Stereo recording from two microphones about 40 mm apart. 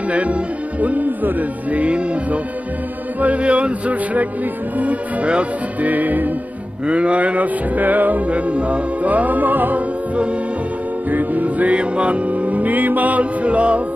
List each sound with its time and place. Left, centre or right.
0.1 s music: right
6.9 s music: right
11.1 s music: right